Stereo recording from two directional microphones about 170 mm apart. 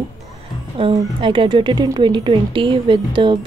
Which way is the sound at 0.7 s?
30° right (ahead or behind).